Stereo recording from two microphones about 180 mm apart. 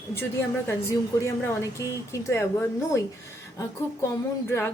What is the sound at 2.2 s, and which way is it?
Speech, 15° left (ahead or behind).